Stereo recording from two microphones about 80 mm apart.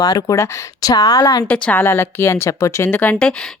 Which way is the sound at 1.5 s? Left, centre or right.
Centre.